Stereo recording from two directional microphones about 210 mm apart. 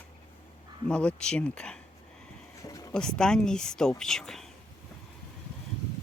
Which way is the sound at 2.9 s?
5° left (ahead or behind).